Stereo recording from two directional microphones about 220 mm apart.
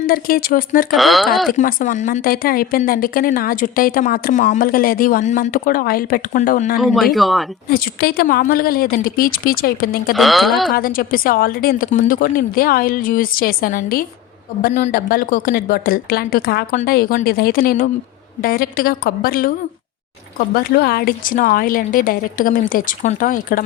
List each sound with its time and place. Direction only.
0.0 s speech: 40° left (ahead or behind)
0.9 s speech: centre (ahead or behind)
1.5 s speech: 35° left (ahead or behind)
6.7 s speech: centre (ahead or behind)
7.7 s speech: 45° left (ahead or behind)
10.2 s speech: centre (ahead or behind)
10.8 s speech: 40° left (ahead or behind)
14.6 s speech: 30° left (ahead or behind)
20.7 s speech: 45° left (ahead or behind)